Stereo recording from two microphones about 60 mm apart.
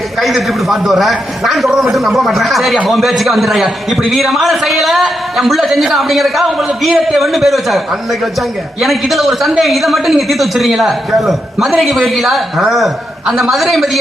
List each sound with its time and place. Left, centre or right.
0.2 s a man's voice: centre